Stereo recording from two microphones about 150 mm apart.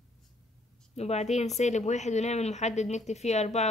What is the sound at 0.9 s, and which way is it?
A woman's voice, 45° left (ahead or behind).